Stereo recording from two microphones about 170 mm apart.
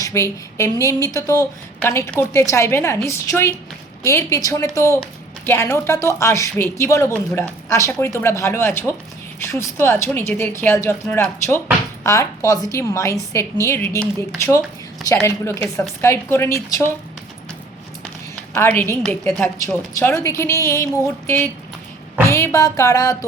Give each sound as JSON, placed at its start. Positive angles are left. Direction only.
{"t": 0.0, "sound": "speech", "side_deg": 15}
{"t": 12.0, "sound": "music", "side_deg": 20}
{"t": 13.3, "sound": "speech", "side_deg": 15}
{"t": 18.5, "sound": "speech", "side_deg": 15}
{"t": 22.3, "sound": "music", "side_deg": 15}